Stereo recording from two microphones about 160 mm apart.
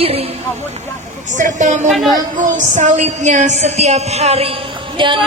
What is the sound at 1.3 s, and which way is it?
A woman's voice, 50° right (ahead or behind).